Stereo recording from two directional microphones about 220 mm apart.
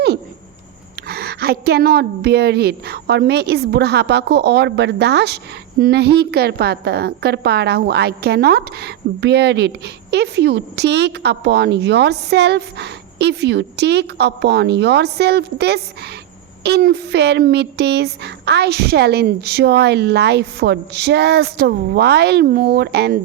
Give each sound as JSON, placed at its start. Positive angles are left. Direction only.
{"t": 1.0, "sound": "a woman's voice", "side_deg": -45}